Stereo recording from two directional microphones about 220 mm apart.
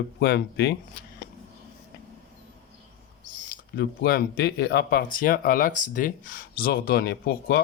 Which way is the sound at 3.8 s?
40° left (ahead or behind).